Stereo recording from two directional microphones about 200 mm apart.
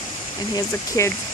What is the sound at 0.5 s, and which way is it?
Speech, 15° left (ahead or behind).